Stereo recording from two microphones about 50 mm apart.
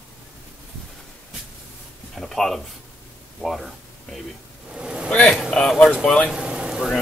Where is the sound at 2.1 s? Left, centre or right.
Centre.